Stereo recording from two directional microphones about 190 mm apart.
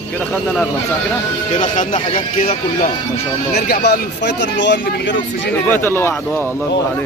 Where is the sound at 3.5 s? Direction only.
55° left (ahead or behind); by 5.5 s 75° left (ahead or behind).